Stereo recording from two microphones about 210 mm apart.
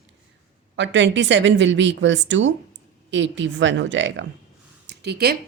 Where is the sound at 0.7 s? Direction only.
60° right (ahead or behind).